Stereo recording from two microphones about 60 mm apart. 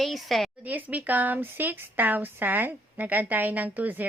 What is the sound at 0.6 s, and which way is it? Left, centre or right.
A woman's voice, right.